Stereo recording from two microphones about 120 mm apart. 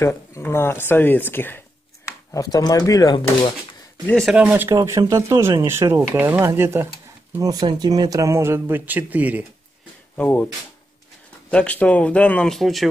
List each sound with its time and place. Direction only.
0.0 s speech: 20° left (ahead or behind)
2.0 s speech: 30° left (ahead or behind)
4.1 s speech: 5° left (ahead or behind)
4.4 s speech: 15° right (ahead or behind)
4.6 s speech: 25° right (ahead or behind)
7.6 s speech: 35° right (ahead or behind); by 9.5 s 15° right (ahead or behind)
10.1 s speech: 15° left (ahead or behind)
11.5 s speech: 10° left (ahead or behind)